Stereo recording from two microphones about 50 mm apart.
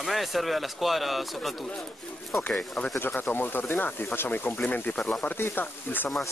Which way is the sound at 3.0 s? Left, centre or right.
Left.